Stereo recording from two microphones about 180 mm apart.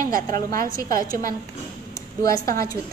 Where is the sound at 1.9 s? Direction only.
20° left (ahead or behind).